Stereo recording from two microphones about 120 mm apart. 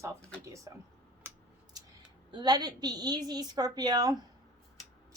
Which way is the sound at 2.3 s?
35° right (ahead or behind).